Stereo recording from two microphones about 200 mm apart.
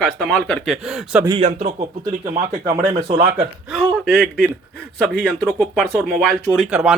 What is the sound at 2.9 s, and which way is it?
Speech, 30° right (ahead or behind).